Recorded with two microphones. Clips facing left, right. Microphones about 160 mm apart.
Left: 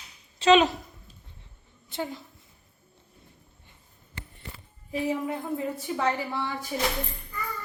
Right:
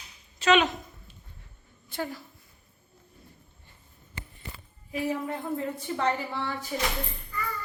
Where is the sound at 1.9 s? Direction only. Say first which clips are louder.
Left 1 dB; 20° left (ahead or behind).